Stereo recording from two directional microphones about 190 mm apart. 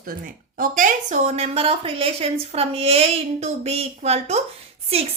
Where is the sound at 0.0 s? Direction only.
50° right (ahead or behind).